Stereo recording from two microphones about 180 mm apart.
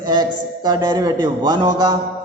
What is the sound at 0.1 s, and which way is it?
A man's voice, 25° right (ahead or behind).